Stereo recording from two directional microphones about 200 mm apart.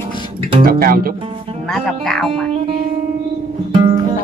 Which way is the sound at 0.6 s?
45° right (ahead or behind).